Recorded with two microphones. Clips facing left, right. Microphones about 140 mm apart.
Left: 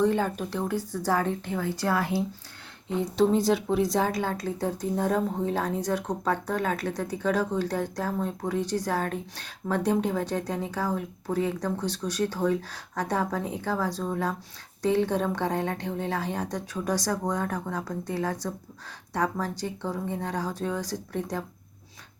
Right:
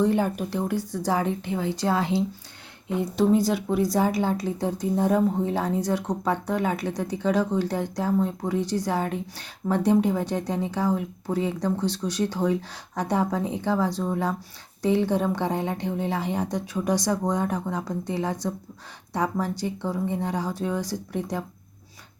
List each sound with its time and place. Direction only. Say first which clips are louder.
0.0 s a woman's voice: right 2 dB; 15° right (ahead or behind)
3.0 s speech: right 2 dB; centre (ahead or behind)
4.0 s speech: right 4 dB; 15° right (ahead or behind)